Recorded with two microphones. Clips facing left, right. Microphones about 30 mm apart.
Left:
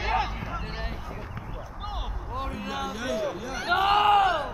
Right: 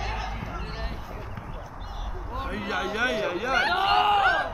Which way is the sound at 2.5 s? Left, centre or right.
Right.